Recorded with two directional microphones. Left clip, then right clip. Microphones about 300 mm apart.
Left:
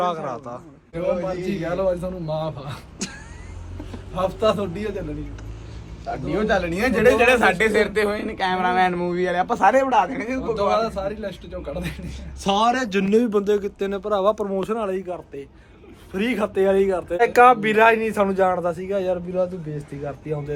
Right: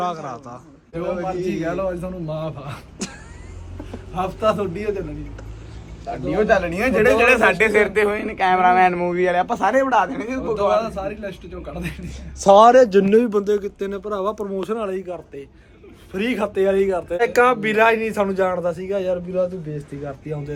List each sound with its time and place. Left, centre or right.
0.0 s a man's voice: centre
1.2 s speech: centre
4.1 s speech: centre
6.1 s speech: centre
10.0 s a man's voice: left
10.8 s speech: centre